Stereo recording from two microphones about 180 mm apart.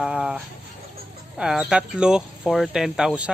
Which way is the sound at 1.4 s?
5° right (ahead or behind).